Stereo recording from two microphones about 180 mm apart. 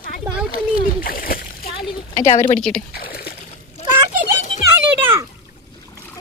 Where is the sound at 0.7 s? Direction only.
55° left (ahead or behind).